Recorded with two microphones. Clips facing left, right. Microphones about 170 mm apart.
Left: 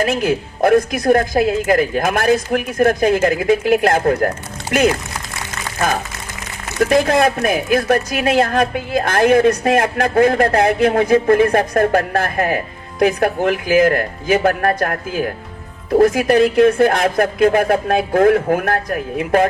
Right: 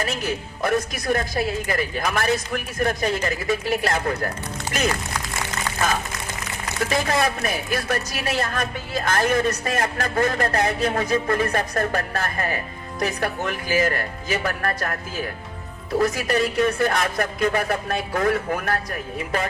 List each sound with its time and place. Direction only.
0.0 s speech: 55° left (ahead or behind)
6.8 s speech: 55° left (ahead or behind)
16.0 s speech: 55° left (ahead or behind)